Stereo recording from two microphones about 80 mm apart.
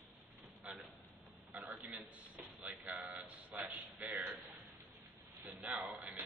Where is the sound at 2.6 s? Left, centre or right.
Centre.